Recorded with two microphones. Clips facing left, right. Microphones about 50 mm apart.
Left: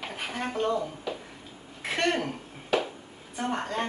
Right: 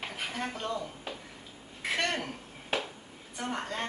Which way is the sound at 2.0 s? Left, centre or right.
Centre.